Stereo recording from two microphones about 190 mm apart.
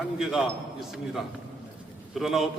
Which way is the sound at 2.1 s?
Centre (ahead or behind).